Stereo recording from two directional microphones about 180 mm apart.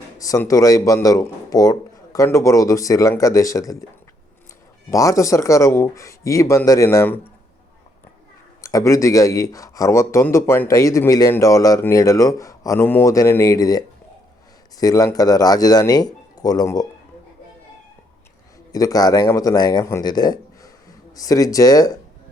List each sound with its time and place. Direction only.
0.2 s speech: 20° left (ahead or behind)
4.9 s speech: 20° left (ahead or behind)
8.6 s speech: 15° left (ahead or behind)
18.7 s speech: 20° left (ahead or behind)